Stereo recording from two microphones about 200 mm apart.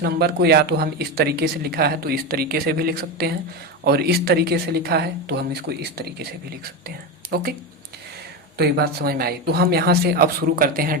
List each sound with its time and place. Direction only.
0.0 s speech: 55° right (ahead or behind)
8.5 s speech: 55° right (ahead or behind)